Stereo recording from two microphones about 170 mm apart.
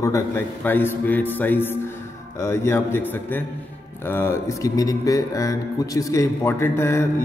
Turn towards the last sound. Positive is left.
turn(degrees=15)  # may be behind; listen again after turning